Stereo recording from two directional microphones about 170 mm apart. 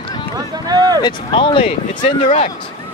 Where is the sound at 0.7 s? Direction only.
20° right (ahead or behind).